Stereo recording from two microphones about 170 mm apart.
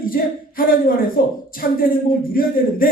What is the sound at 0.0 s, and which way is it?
A man's voice, 55° left (ahead or behind).